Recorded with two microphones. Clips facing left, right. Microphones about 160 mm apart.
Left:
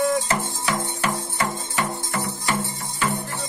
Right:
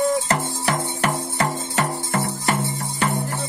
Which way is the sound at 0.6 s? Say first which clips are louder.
Right 2 dB; 60° right (ahead or behind).